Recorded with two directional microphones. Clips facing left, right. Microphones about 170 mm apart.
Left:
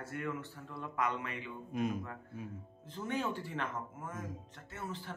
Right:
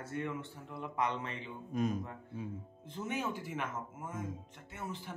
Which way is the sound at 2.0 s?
25° right (ahead or behind).